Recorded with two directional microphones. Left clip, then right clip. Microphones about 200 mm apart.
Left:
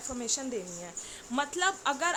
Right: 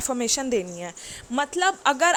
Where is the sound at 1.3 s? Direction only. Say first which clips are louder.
Right 7 dB; 30° right (ahead or behind).